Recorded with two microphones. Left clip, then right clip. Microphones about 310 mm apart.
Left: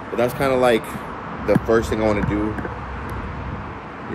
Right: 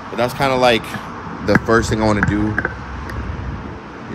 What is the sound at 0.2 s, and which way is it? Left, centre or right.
Speech, centre.